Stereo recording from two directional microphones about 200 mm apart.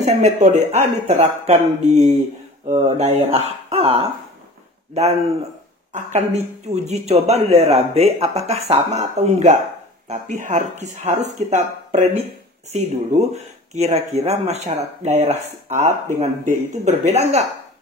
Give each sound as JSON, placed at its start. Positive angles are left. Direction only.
{"t": 0.0, "sound": "speech", "side_deg": -35}